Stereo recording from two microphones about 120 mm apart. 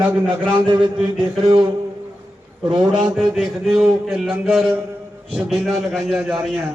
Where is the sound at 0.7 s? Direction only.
40° right (ahead or behind).